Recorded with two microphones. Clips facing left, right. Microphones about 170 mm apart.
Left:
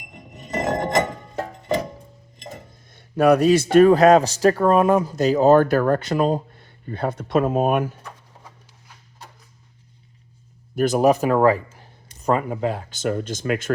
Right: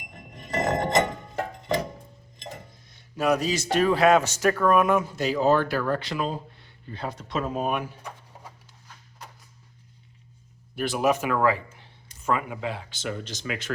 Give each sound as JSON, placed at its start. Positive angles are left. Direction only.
{"t": 0.3, "sound": "music", "side_deg": 10}
{"t": 2.9, "sound": "speech", "side_deg": 55}
{"t": 10.8, "sound": "speech", "side_deg": 40}